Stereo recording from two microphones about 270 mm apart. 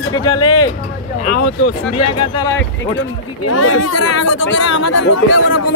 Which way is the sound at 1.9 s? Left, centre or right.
Left.